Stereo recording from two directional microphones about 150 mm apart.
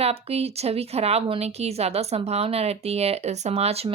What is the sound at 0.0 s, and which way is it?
A woman's voice, 40° right (ahead or behind).